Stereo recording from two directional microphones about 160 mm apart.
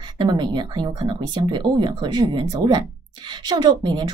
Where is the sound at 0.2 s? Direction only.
30° right (ahead or behind).